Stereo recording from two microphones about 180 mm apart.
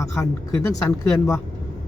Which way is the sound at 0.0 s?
15° left (ahead or behind).